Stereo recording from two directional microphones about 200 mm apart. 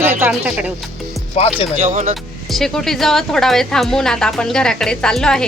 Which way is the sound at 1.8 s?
35° right (ahead or behind).